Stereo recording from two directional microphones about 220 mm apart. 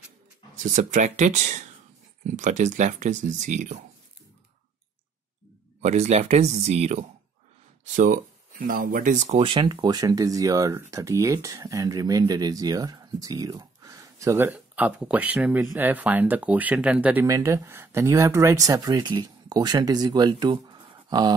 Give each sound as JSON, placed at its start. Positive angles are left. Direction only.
{"t": 0.6, "sound": "speech", "side_deg": -35}
{"t": 5.8, "sound": "speech", "side_deg": -30}